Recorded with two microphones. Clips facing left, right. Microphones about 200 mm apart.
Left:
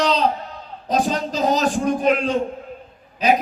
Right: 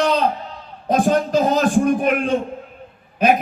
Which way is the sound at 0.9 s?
55° right (ahead or behind).